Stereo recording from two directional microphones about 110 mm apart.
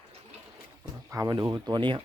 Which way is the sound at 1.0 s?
30° right (ahead or behind).